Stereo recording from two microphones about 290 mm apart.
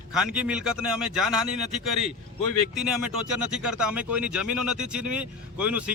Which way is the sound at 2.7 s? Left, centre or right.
Centre.